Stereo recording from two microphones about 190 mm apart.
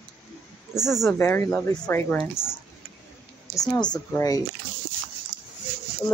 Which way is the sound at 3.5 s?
15° left (ahead or behind).